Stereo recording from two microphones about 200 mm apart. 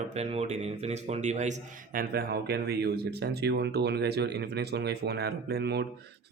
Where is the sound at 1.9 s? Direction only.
50° right (ahead or behind).